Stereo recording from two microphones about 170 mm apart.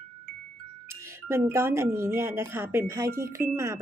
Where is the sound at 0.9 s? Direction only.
15° right (ahead or behind).